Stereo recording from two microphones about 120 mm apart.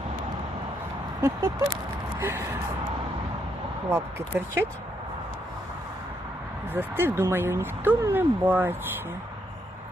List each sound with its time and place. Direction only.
1.2 s speech: 30° right (ahead or behind)
3.8 s speech: 20° right (ahead or behind)
6.7 s speech: 20° right (ahead or behind)